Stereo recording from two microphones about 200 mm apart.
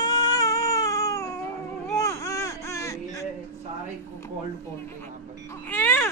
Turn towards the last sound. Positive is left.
turn(degrees=10)  # may be behind; listen again after turning